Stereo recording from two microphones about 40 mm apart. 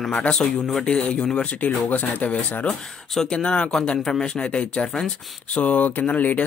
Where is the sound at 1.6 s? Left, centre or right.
Left.